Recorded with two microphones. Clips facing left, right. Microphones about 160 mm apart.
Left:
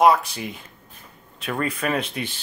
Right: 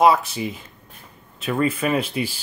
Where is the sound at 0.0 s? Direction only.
Centre (ahead or behind).